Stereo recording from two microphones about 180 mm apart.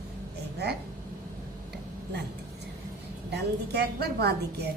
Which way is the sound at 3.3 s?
65° right (ahead or behind).